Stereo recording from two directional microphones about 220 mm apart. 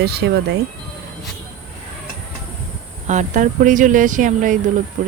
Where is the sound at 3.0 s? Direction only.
35° right (ahead or behind).